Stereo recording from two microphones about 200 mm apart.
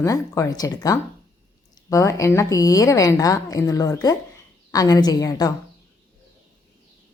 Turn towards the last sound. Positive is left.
turn(degrees=20)  # may be behind; listen again after turning